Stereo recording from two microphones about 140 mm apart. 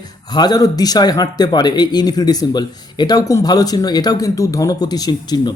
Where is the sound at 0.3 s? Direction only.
30° left (ahead or behind).